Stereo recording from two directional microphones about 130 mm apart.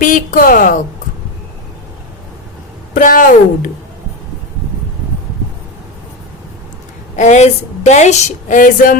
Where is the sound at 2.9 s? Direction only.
90° left.